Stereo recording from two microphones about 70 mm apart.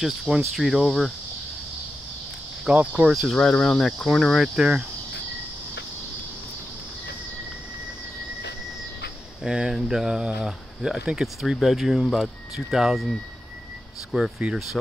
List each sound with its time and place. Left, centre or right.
0.0 s cricket: centre
2.6 s cricket: centre
3.1 s cricket: centre
3.3 s speech: centre
4.6 s speech: centre
9.4 s speech: centre
14.1 s cricket: centre